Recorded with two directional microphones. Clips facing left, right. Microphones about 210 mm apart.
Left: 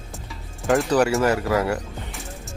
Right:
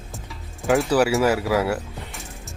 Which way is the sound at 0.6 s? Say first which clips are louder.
Even; centre (ahead or behind).